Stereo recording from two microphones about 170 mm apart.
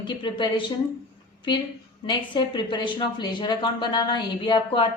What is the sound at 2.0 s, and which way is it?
A woman's voice, 25° left (ahead or behind).